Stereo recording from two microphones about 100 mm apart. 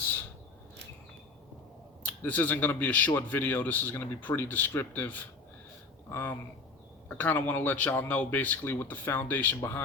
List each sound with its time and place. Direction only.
2.2 s speech: 15° left (ahead or behind)